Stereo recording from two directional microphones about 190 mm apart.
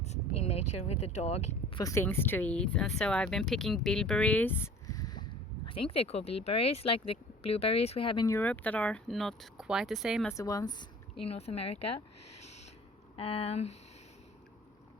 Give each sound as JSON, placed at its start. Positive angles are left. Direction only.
{"t": 0.0, "sound": "vehicle", "side_deg": 35}
{"t": 1.7, "sound": "speech", "side_deg": 15}
{"t": 8.4, "sound": "speech", "side_deg": 10}
{"t": 10.2, "sound": "speech", "side_deg": 15}
{"t": 11.3, "sound": "speech", "side_deg": 30}
{"t": 12.4, "sound": "a sound", "side_deg": 35}
{"t": 13.4, "sound": "speech", "side_deg": 35}